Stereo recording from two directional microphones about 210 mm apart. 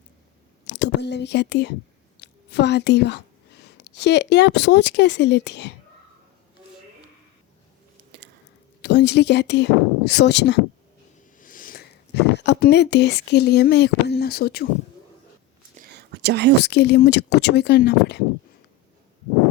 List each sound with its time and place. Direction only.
0.7 s a woman's voice: 55° left (ahead or behind)
7.9 s a sound: 55° right (ahead or behind)
8.8 s speech: 55° left (ahead or behind)
11.3 s speech: 40° left (ahead or behind)
15.7 s a sound: 45° right (ahead or behind)
16.6 s speech: 50° left (ahead or behind)